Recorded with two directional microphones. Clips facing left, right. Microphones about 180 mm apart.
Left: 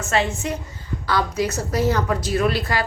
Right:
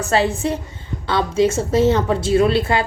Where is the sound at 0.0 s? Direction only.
35° right (ahead or behind).